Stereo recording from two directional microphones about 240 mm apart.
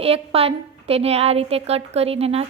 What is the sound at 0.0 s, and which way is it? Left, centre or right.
A woman's voice, right.